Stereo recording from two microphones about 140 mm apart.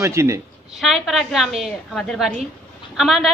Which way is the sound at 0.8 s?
Centre (ahead or behind).